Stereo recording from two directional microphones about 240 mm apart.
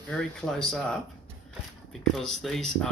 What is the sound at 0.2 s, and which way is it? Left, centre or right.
Speech, centre.